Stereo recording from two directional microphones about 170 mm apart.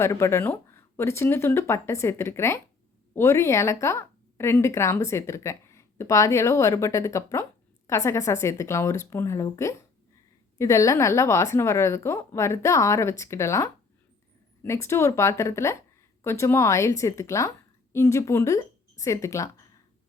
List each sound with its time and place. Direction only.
0.0 s a woman's voice: 15° left (ahead or behind)